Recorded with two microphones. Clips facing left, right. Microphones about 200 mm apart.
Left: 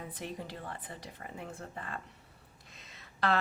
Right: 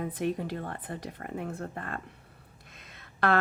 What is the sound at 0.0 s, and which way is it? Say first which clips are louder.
Speech: right 10 dB; 60° right (ahead or behind).